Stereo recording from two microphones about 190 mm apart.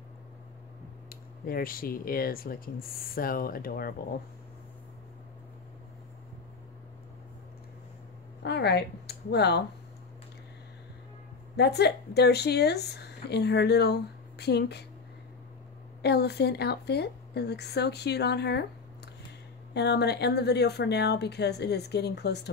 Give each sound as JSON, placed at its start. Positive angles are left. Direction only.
{"t": 1.0, "sound": "speech", "side_deg": 50}
{"t": 8.4, "sound": "a sound", "side_deg": 60}
{"t": 11.5, "sound": "speech", "side_deg": 60}
{"t": 16.0, "sound": "speech", "side_deg": 60}
{"t": 19.7, "sound": "speech", "side_deg": 60}